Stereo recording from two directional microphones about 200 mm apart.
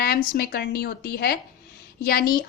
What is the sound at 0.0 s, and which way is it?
A woman's voice, 50° left (ahead or behind).